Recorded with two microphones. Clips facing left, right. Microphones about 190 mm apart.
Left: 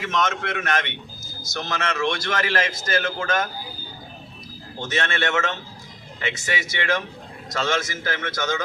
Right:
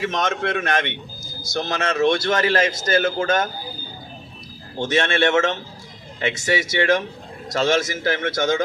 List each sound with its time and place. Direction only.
0.0 s a man's voice: 30° right (ahead or behind)
4.8 s a man's voice: 30° right (ahead or behind)